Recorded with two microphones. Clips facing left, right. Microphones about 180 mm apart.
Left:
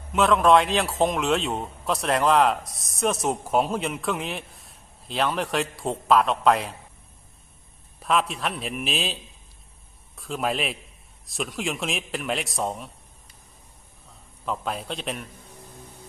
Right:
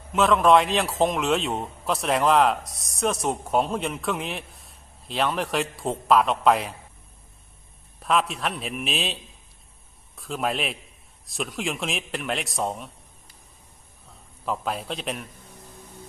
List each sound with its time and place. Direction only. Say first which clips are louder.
0.1 s a man's voice: even; centre (ahead or behind)
7.9 s a man's voice: even; centre (ahead or behind)
10.2 s a man's voice: even; centre (ahead or behind)